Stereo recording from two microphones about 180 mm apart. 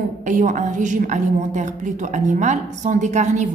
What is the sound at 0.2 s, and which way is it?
A woman's voice, 45° right (ahead or behind).